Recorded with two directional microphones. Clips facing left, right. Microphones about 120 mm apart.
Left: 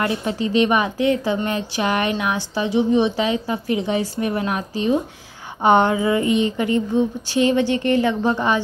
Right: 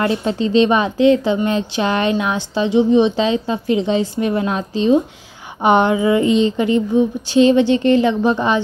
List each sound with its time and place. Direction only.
0.0 s a woman's voice: 25° right (ahead or behind)